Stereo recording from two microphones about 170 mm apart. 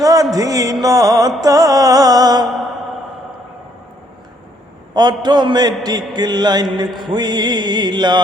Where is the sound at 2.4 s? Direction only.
Centre (ahead or behind).